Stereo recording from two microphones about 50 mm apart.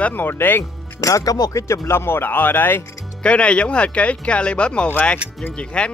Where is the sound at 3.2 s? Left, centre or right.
Left.